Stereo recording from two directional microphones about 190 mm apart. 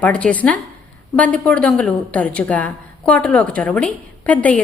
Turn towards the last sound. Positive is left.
turn(degrees=10)  # may be behind; listen again after turning